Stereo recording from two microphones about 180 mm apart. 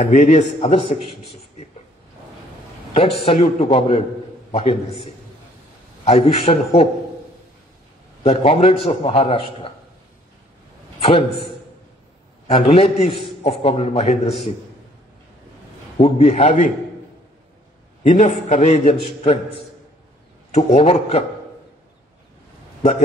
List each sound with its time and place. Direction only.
0.0 s a man's voice: 40° left (ahead or behind)
2.9 s a man's voice: 30° left (ahead or behind)
6.0 s a man's voice: 30° left (ahead or behind)
8.2 s a man's voice: 30° left (ahead or behind)
11.0 s a man's voice: 30° left (ahead or behind)
16.0 s a man's voice: 35° left (ahead or behind)
18.0 s a man's voice: 40° left (ahead or behind)
20.5 s a man's voice: 30° left (ahead or behind)